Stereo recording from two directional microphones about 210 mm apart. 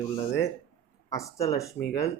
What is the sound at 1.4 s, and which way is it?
Speech, 15° left (ahead or behind).